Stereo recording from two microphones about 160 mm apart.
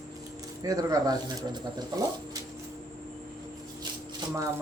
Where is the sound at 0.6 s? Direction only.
25° right (ahead or behind).